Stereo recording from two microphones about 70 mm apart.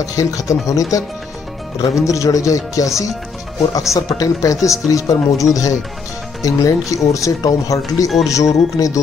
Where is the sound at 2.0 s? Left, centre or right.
Left.